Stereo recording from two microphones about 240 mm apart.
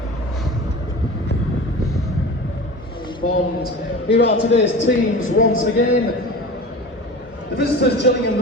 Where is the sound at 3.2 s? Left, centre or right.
Left.